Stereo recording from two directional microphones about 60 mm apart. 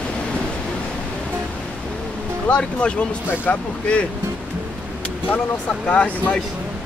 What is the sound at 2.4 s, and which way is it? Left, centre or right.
Speech, centre.